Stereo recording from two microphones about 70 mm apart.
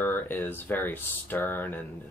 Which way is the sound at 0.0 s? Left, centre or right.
Left.